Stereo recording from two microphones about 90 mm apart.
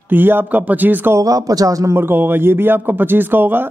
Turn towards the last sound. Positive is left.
turn(degrees=-25)  # may be behind; listen again after turning